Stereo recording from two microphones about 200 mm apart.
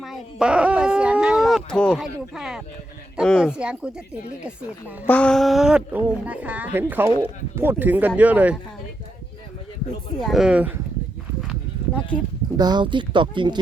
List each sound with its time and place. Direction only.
0.0 s speech: centre (ahead or behind)
5.0 s speech: 5° left (ahead or behind)
10.2 s speech: centre (ahead or behind)
12.5 s speech: 20° right (ahead or behind)